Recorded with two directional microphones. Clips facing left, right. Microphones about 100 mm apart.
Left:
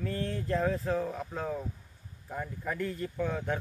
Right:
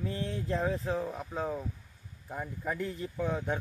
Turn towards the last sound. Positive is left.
turn(degrees=-10)  # may be behind; listen again after turning